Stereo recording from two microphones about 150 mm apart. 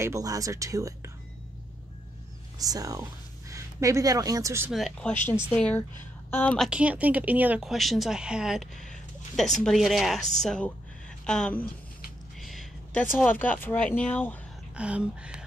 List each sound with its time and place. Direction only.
0.0 s speech: 20° right (ahead or behind)
2.6 s speech: 25° right (ahead or behind)
4.6 s speech: centre (ahead or behind)
5.5 s a woman's voice: 10° left (ahead or behind)
6.7 s a woman's voice: 10° right (ahead or behind)
12.4 s a sound: centre (ahead or behind)
13.2 s speech: 10° left (ahead or behind)
14.8 s a sound: 5° right (ahead or behind)